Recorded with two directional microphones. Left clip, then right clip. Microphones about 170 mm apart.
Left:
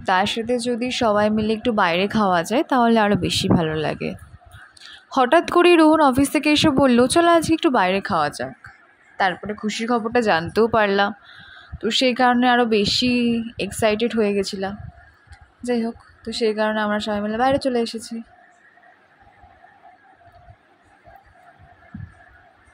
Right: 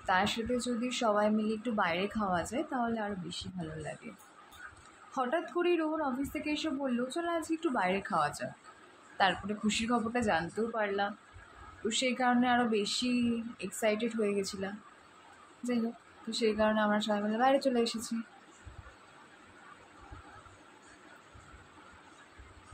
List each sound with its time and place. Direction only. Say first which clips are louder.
0.0 s speech: left 11 dB; 50° left (ahead or behind); by 3.4 s 80° left
5.1 s speech: left 17 dB; 65° left (ahead or behind); by 8.5 s 50° left (ahead or behind)
9.2 s speech: left 8 dB; 35° left (ahead or behind); by 11.1 s 70° left (ahead or behind)
11.9 s speech: left 13 dB; 60° left (ahead or behind)
16.3 s speech: left 9 dB; 45° left (ahead or behind)